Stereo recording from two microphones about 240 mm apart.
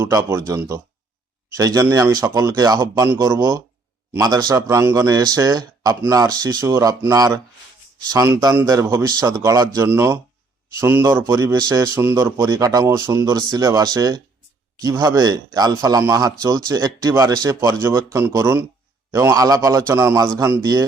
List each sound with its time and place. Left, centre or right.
0.0 s speech: centre